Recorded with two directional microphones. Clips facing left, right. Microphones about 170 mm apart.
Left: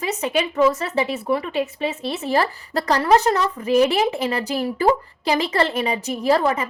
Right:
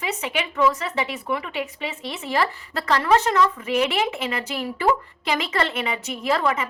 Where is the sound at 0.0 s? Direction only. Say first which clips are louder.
Left 5 dB; 40° left (ahead or behind).